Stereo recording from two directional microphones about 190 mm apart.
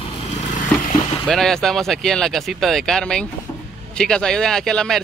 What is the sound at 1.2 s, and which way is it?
Speech, 5° left (ahead or behind).